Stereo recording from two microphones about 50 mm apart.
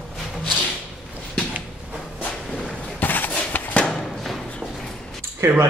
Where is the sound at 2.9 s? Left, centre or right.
Left.